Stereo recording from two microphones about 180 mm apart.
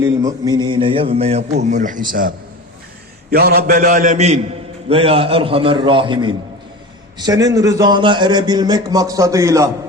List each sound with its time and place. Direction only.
0.0 s a man's voice: 20° right (ahead or behind)